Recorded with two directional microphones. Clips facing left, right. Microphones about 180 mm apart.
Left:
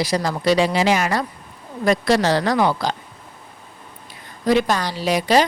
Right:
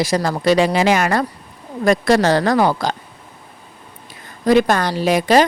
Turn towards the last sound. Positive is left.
turn(degrees=-50)  # may be behind; listen again after turning